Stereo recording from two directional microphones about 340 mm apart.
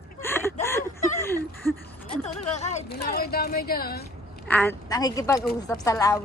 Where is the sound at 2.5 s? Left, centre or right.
Centre.